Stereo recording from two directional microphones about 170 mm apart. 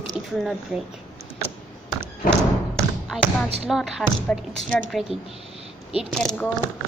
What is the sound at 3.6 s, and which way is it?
A woman's voice, centre (ahead or behind).